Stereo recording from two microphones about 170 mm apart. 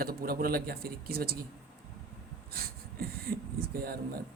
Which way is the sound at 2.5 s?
65° right (ahead or behind).